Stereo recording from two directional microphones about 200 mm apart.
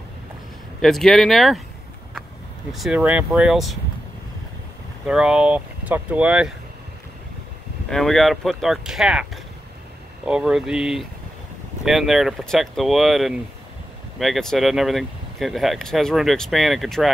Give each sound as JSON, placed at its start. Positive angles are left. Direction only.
{"t": 0.7, "sound": "speech", "side_deg": 0}
{"t": 2.7, "sound": "speech", "side_deg": -5}
{"t": 5.0, "sound": "speech", "side_deg": -5}
{"t": 7.9, "sound": "speech", "side_deg": 0}
{"t": 10.2, "sound": "speech", "side_deg": -5}